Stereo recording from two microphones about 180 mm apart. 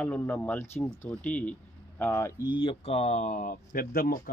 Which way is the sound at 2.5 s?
30° left (ahead or behind).